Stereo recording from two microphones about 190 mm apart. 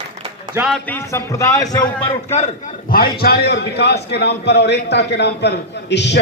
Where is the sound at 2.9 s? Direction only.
50° left (ahead or behind).